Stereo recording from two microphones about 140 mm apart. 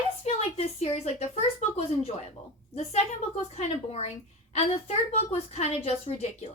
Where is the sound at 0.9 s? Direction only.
50° left (ahead or behind).